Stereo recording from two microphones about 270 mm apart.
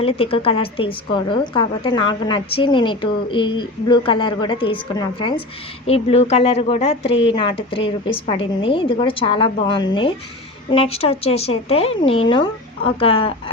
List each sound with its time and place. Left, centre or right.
0.0 s a woman's voice: left